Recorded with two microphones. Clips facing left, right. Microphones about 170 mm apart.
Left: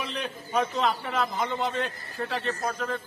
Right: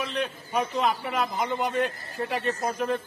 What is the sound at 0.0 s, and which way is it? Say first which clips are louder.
A man's voice: right 3 dB; centre (ahead or behind).